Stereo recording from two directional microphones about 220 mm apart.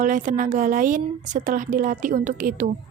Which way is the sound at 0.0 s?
35° right (ahead or behind).